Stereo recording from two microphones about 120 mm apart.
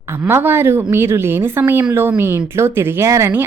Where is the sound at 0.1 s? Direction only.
20° right (ahead or behind).